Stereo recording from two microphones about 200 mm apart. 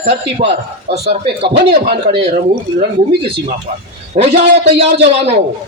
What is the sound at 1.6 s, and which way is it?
A man's voice, 50° right (ahead or behind).